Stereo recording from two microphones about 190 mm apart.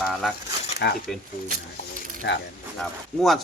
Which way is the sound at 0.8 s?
65° left (ahead or behind).